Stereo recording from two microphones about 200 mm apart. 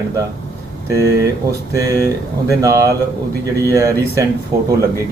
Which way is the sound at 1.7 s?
15° right (ahead or behind).